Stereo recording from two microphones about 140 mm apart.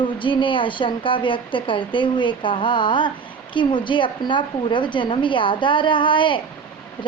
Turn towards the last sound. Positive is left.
turn(degrees=35)  # may be behind; listen again after turning